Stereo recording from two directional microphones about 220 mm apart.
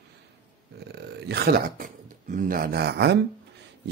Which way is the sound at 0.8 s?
50° right (ahead or behind).